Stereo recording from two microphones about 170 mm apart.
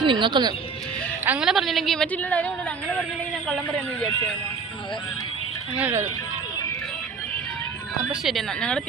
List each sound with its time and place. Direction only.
0.0 s speech: 30° right (ahead or behind)
1.2 s a woman's voice: 5° right (ahead or behind)
5.7 s speech: 10° right (ahead or behind)
8.1 s a woman's voice: centre (ahead or behind)